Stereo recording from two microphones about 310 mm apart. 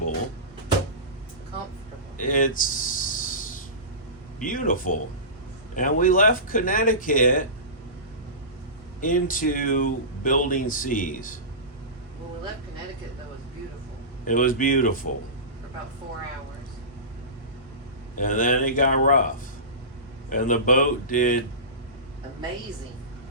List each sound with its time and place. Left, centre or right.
2.1 s a sound: left
4.4 s speech: left
9.0 s speech: left
14.3 s speech: left
18.2 s speech: left
20.3 s speech: left